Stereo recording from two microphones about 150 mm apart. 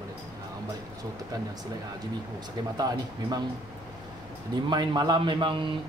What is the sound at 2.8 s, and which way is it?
Speech, 25° right (ahead or behind).